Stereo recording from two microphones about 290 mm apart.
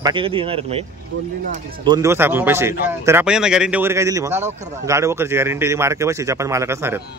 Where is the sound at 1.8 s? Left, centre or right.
Centre.